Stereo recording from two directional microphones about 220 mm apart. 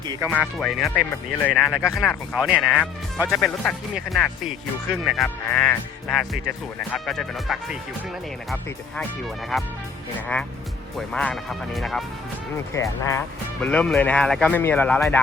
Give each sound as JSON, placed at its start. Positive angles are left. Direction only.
{"t": 0.3, "sound": "speech", "side_deg": 0}
{"t": 0.9, "sound": "speech", "side_deg": 15}
{"t": 1.5, "sound": "speech", "side_deg": 0}
{"t": 10.2, "sound": "speech", "side_deg": 5}
{"t": 12.7, "sound": "speech", "side_deg": 15}